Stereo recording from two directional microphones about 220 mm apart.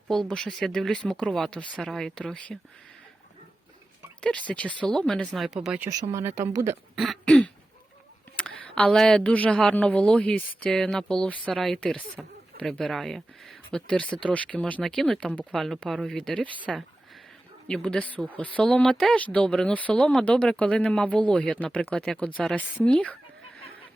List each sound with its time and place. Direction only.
0.1 s speech: 5° left (ahead or behind)
4.2 s speech: 5° left (ahead or behind)